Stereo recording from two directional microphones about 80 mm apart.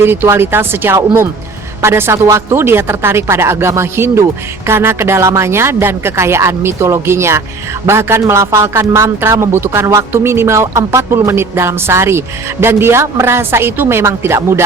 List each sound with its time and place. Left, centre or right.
0.0 s speech: right